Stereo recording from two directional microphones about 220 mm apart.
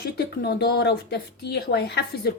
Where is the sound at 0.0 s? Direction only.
45° left (ahead or behind).